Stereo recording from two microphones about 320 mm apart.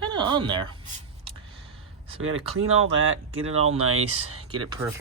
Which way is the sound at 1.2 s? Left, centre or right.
Centre.